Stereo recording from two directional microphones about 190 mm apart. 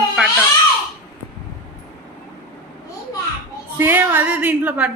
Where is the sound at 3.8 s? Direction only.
10° right (ahead or behind).